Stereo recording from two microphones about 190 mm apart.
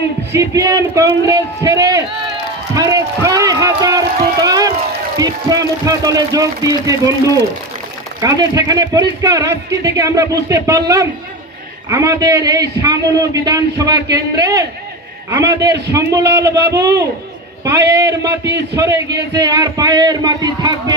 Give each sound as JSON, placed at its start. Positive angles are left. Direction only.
{"t": 0.3, "sound": "a man's voice", "side_deg": -15}
{"t": 2.7, "sound": "a sound", "side_deg": -15}
{"t": 4.4, "sound": "run", "side_deg": -20}
{"t": 5.1, "sound": "a man's voice", "side_deg": -20}
{"t": 8.2, "sound": "a man's voice", "side_deg": -20}
{"t": 16.5, "sound": "a man's voice", "side_deg": -60}
{"t": 16.7, "sound": "a man's voice", "side_deg": -20}